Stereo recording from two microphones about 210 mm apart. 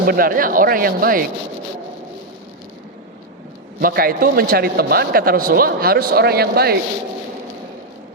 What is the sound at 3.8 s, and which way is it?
A man's voice, 45° right (ahead or behind).